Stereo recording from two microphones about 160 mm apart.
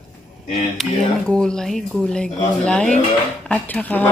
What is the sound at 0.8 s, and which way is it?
Speech, centre (ahead or behind).